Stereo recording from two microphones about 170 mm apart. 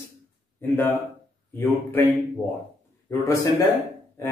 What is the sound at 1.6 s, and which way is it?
Speech, 15° left (ahead or behind).